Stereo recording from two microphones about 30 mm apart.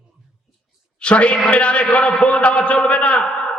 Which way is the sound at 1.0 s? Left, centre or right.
Left.